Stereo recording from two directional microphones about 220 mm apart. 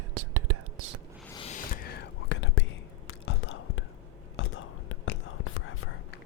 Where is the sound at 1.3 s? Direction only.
25° left (ahead or behind).